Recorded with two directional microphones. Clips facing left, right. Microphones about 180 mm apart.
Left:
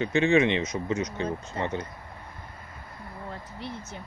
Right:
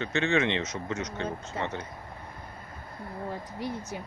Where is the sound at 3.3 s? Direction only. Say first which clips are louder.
Right 3 dB; 15° right (ahead or behind).